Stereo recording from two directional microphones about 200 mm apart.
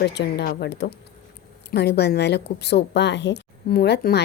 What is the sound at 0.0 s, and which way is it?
Speech, 55° left (ahead or behind).